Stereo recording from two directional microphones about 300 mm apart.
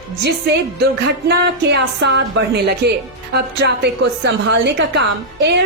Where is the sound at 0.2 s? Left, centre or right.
Right.